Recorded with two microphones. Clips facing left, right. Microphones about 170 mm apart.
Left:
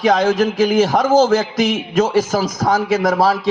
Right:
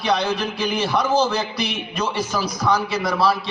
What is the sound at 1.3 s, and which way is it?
Speech, 90° left.